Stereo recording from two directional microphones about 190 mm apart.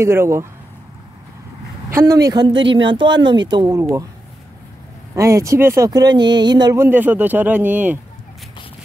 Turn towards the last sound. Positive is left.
turn(degrees=-10)  # may be behind; listen again after turning